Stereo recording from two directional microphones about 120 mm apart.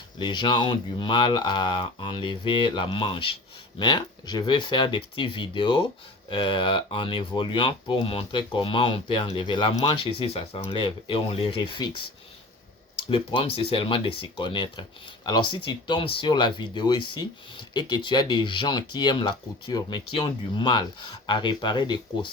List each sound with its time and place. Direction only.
0.2 s speech: 40° left (ahead or behind)